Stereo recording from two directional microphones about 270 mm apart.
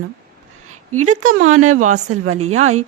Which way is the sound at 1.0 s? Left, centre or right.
Right.